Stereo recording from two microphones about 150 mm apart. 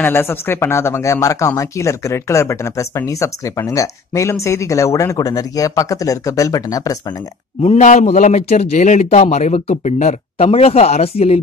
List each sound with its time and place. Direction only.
0.0 s speech: 15° left (ahead or behind)
7.6 s a man's voice: 50° left (ahead or behind)